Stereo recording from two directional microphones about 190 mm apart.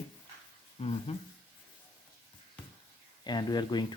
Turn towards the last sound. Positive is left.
turn(degrees=20)  # may be behind; listen again after turning